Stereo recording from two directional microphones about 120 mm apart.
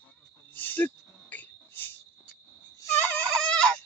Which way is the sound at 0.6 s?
15° left (ahead or behind).